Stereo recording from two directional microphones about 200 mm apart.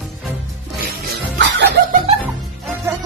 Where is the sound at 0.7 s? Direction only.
50° right (ahead or behind).